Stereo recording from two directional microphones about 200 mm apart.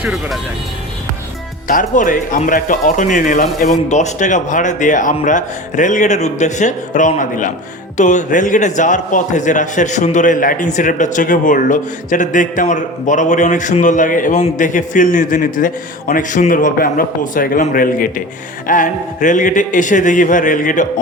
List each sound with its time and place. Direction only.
0.0 s music: 5° right (ahead or behind)
1.6 s a man's voice: 40° left (ahead or behind)